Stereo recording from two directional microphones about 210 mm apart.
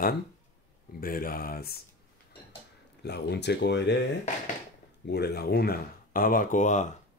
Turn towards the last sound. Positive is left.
turn(degrees=35)  # may be behind; listen again after turning